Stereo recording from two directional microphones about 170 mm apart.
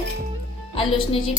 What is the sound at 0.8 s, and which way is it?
Speech, 30° left (ahead or behind).